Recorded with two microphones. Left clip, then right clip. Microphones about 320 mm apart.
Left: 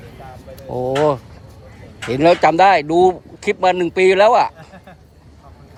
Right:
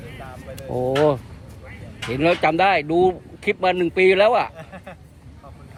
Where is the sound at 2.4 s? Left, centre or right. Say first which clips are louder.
Left 6 dB; centre.